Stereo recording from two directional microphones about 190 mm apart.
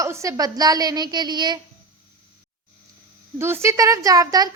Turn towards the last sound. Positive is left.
turn(degrees=-20)  # may be behind; listen again after turning